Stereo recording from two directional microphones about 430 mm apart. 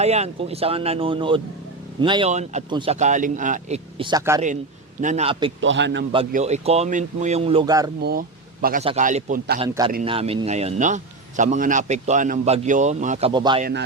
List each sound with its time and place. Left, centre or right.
0.0 s a man's voice: centre
5.5 s a man's voice: right
6.1 s a man's voice: centre